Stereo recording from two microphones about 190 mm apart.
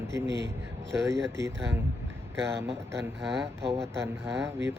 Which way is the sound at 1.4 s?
15° right (ahead or behind).